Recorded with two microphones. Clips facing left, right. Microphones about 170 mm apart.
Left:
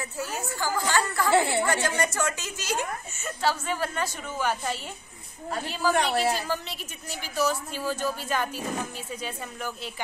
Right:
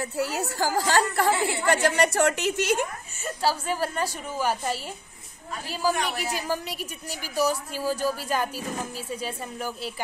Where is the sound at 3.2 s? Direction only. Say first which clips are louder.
Right 2 dB; 35° right (ahead or behind).